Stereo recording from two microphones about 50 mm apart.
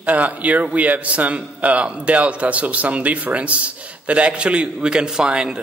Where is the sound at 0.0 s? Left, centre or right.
Right.